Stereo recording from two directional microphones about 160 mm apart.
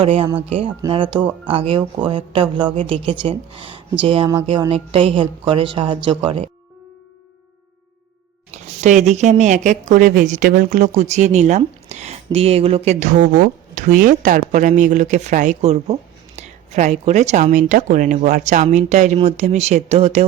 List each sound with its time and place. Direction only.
0.0 s speech: 35° right (ahead or behind)
8.8 s speech: 45° right (ahead or behind)